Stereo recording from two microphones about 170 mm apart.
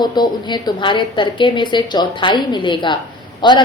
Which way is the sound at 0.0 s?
25° left (ahead or behind).